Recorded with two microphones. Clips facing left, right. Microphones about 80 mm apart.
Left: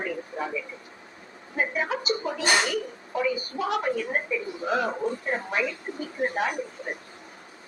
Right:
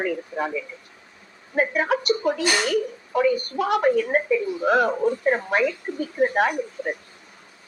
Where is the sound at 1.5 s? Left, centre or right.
Right.